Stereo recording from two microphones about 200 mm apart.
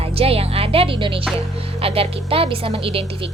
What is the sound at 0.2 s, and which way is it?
A woman's voice, 30° right (ahead or behind).